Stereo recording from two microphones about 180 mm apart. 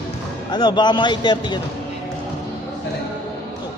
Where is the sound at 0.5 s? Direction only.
25° left (ahead or behind).